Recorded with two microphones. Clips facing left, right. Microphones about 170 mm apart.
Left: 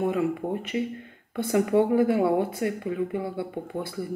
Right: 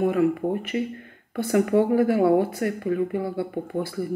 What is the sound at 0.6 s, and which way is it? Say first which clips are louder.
Speech: right 2 dB; 55° right (ahead or behind).